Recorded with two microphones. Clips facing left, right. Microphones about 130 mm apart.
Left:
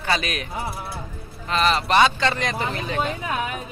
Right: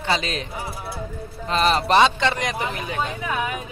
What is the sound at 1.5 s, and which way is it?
Speech, 35° right (ahead or behind).